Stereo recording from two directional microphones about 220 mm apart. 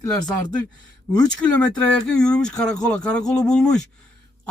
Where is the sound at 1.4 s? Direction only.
5° left (ahead or behind).